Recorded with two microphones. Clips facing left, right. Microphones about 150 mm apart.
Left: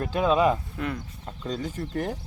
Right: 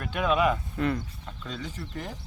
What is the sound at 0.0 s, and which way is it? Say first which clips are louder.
Speech: left 3 dB; 30° left (ahead or behind).